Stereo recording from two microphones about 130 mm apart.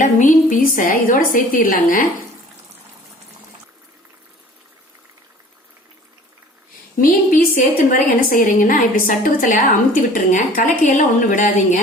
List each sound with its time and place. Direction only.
0.0 s a woman's voice: 75° left (ahead or behind)
7.0 s a woman's voice: 90° left